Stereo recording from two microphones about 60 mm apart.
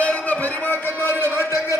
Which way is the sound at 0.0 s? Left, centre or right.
Left.